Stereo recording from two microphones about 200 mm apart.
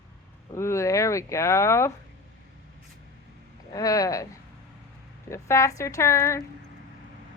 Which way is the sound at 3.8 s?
15° left (ahead or behind).